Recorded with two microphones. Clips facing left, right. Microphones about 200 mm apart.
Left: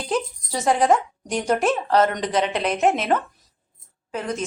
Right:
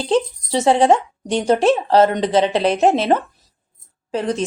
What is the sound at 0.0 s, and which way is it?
Speech, 30° right (ahead or behind).